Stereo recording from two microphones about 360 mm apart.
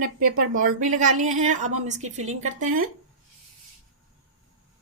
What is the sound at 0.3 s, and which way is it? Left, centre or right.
Speech, right.